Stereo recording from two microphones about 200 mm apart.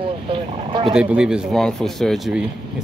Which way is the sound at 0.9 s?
5° right (ahead or behind).